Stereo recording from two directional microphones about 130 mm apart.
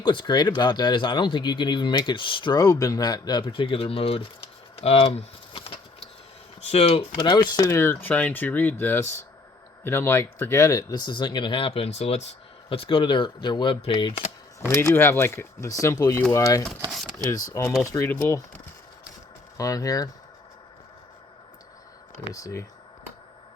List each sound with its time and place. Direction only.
0.0 s speech: 40° left (ahead or behind)
4.8 s a sound: 50° left (ahead or behind)
6.6 s speech: 55° left (ahead or behind)
7.2 s speech: 35° left (ahead or behind); by 12.2 s 55° left (ahead or behind)
12.6 s speech: 45° left (ahead or behind)
14.7 s speech: 20° left (ahead or behind)
16.9 s a sound: centre (ahead or behind)
17.5 s speech: 20° left (ahead or behind)
19.5 s speech: 25° left (ahead or behind)
22.3 s speech: 25° left (ahead or behind)